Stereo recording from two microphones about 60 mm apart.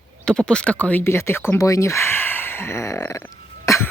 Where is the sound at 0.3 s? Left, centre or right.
Centre.